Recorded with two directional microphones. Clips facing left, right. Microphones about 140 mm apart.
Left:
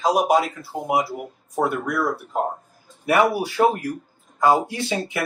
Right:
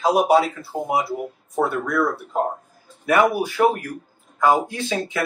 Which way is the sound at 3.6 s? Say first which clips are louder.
Even; 15° left (ahead or behind).